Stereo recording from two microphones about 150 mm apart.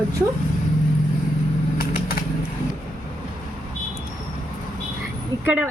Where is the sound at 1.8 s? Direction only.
85° left.